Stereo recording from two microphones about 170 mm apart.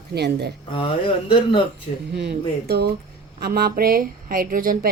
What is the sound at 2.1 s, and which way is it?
A woman's voice, 80° right.